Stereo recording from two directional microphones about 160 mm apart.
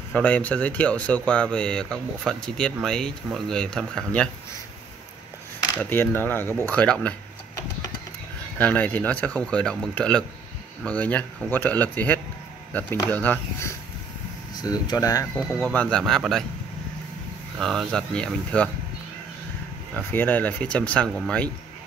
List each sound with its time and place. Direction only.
0.1 s speech: 10° left (ahead or behind)
5.8 s speech: 15° left (ahead or behind)
8.5 s speech: 10° left (ahead or behind)
15.5 s speech: 10° left (ahead or behind)
17.6 s speech: centre (ahead or behind)
20.1 s speech: 10° left (ahead or behind)